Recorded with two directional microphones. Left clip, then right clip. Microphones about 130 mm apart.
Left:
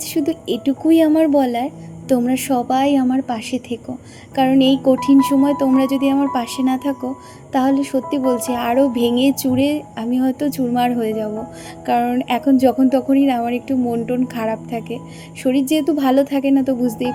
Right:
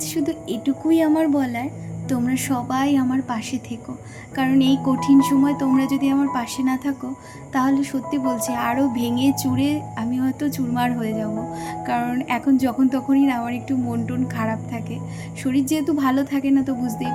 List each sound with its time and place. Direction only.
0.1 s a woman's voice: 45° left (ahead or behind)